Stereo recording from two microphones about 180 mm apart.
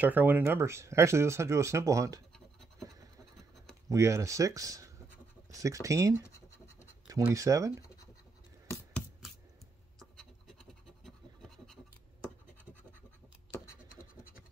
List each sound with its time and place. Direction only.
0.0 s speech: 10° right (ahead or behind)
2.3 s scratch: centre (ahead or behind)
3.9 s speech: 15° right (ahead or behind)
7.3 s speech: 15° right (ahead or behind)
9.9 s scratch: centre (ahead or behind)